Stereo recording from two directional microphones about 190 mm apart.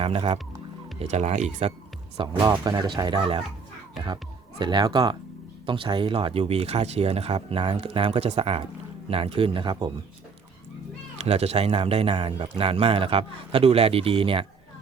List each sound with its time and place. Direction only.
0.0 s speech: 30° right (ahead or behind)
2.1 s a man's voice: 20° right (ahead or behind)
11.2 s a man's voice: 35° right (ahead or behind)